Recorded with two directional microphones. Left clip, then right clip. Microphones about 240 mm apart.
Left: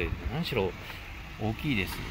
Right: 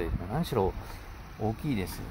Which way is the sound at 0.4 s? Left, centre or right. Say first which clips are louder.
Right 1 dB; centre.